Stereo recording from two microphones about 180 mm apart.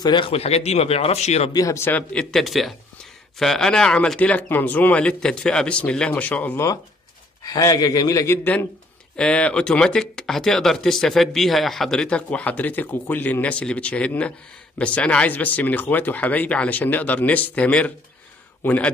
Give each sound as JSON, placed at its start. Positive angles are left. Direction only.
{"t": 0.0, "sound": "speech", "side_deg": 25}
{"t": 1.5, "sound": "a man's voice", "side_deg": 20}